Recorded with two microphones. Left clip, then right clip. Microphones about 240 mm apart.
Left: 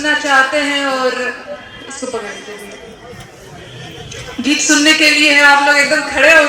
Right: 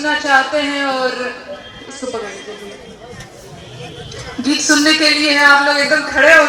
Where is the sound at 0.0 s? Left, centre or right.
Left.